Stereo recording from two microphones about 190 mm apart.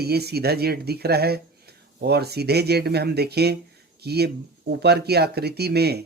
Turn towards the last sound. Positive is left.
turn(degrees=-55)  # may be behind; listen again after turning